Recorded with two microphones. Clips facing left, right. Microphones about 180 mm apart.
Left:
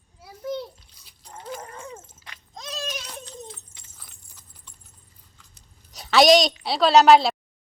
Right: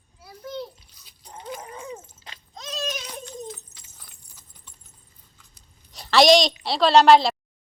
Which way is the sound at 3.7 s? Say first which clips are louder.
Even; 30° left (ahead or behind).